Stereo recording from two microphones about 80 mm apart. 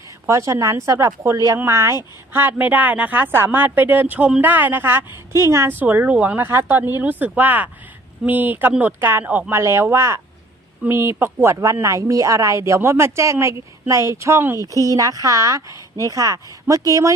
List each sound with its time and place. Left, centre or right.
0.3 s speech: right
2.3 s speech: right
5.7 s speech: right